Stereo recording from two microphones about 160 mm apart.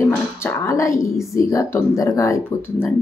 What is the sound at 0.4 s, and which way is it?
Speech, 15° left (ahead or behind).